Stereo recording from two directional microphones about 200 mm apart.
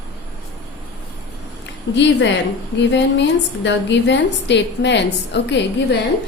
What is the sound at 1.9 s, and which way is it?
Speech, 60° left (ahead or behind).